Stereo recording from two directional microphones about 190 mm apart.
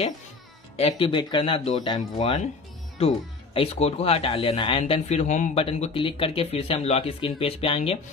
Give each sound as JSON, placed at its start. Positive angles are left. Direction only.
{"t": 0.7, "sound": "speech", "side_deg": 30}
{"t": 3.5, "sound": "speech", "side_deg": 30}